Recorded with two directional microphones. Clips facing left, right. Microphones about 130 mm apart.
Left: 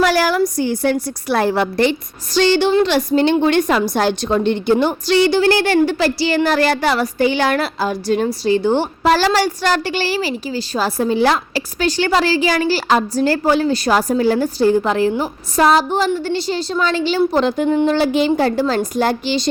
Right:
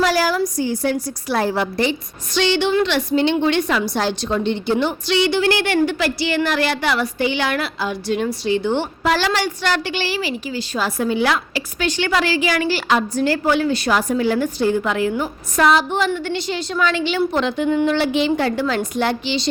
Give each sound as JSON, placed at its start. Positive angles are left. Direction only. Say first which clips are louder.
{"t": 0.0, "sound": "a sound", "louder": "left 3 dB", "side_deg": 65}
{"t": 0.5, "sound": "a woman's voice", "louder": "left 3 dB", "side_deg": 65}
{"t": 2.3, "sound": "a woman's voice", "louder": "left 4 dB", "side_deg": 40}